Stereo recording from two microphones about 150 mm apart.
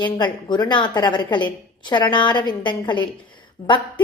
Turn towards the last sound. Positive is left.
turn(degrees=20)  # may be behind; listen again after turning